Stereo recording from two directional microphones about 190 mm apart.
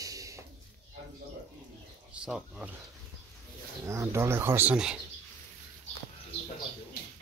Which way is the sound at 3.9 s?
15° right (ahead or behind).